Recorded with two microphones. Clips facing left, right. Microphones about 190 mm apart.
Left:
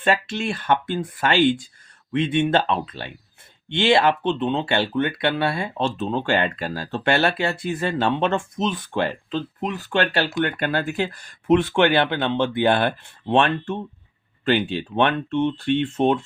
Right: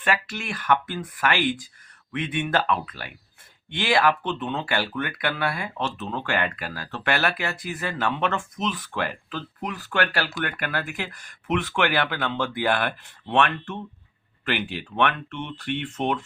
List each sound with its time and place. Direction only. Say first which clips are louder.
0.0 s speech: left 5 dB; 25° left (ahead or behind)